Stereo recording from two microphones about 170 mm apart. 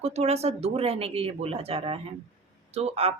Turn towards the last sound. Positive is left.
turn(degrees=-35)  # may be behind; listen again after turning